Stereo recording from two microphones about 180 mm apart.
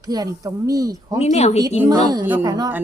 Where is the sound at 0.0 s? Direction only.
20° right (ahead or behind).